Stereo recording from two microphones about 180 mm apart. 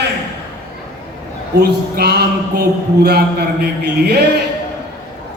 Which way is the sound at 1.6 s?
60° right (ahead or behind).